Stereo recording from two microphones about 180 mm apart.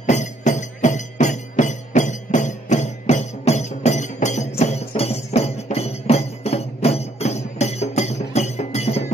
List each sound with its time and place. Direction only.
0.0 s music: 40° left (ahead or behind)